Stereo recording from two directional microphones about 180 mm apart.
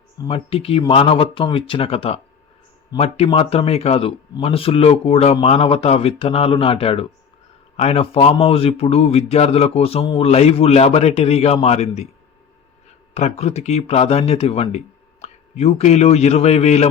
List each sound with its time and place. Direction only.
0.3 s a man's voice: 30° left (ahead or behind)
13.1 s a man's voice: 35° left (ahead or behind)